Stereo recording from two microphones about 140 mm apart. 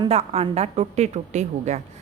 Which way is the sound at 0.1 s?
45° right (ahead or behind).